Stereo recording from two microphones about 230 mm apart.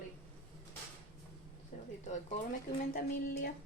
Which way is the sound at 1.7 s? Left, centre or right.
Left.